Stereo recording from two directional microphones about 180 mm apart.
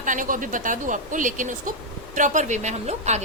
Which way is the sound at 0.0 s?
45° right (ahead or behind).